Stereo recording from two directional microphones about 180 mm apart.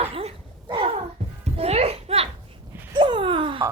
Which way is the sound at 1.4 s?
35° right (ahead or behind).